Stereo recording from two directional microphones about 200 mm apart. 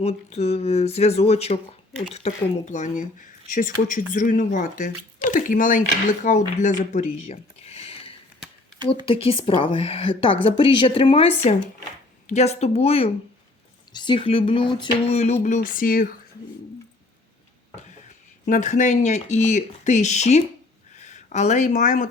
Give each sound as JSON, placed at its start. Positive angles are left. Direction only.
{"t": 0.0, "sound": "speech", "side_deg": 30}
{"t": 18.4, "sound": "speech", "side_deg": 40}